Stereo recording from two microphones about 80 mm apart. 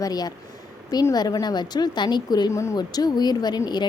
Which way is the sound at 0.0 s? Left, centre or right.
Left.